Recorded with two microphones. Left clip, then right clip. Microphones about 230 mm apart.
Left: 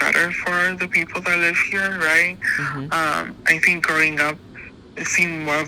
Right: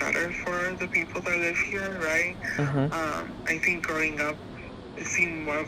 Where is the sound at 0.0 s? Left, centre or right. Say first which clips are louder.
Left 9 dB; left.